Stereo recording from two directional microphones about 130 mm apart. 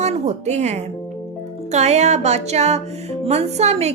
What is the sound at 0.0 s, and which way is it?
A woman's voice, 60° right (ahead or behind).